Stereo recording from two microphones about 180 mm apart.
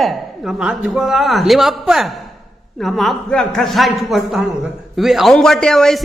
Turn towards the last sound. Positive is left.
turn(degrees=5)  # may be behind; listen again after turning